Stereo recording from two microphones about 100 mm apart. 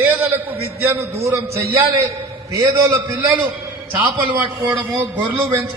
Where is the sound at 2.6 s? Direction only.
30° right (ahead or behind).